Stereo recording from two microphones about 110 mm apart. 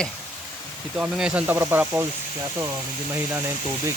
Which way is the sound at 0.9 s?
10° right (ahead or behind).